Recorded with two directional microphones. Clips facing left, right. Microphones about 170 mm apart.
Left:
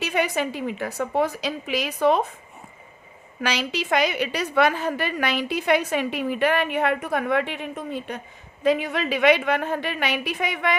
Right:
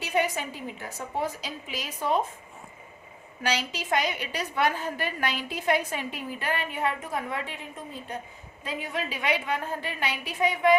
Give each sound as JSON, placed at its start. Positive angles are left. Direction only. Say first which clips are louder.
{"t": 0.0, "sound": "a woman's voice", "louder": "left 4 dB", "side_deg": 75}
{"t": 3.4, "sound": "a woman's voice", "louder": "left 4 dB", "side_deg": 75}